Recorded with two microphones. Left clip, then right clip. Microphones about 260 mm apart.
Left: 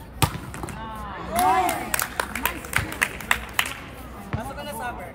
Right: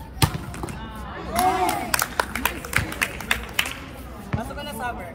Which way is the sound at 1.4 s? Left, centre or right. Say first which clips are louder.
Left 1 dB; centre.